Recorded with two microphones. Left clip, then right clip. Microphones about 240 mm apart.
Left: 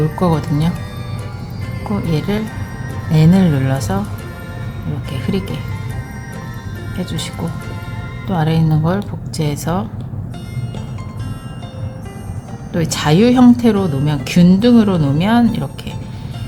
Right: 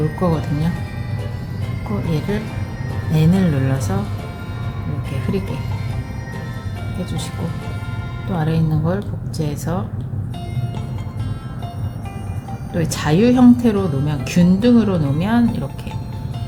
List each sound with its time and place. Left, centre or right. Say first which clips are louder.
0.2 s speech: left 4 dB; left
2.0 s speech: left 3 dB; left
7.0 s speech: left 4 dB; left
8.3 s speech: left 4 dB; left
12.7 s speech: left 4 dB; left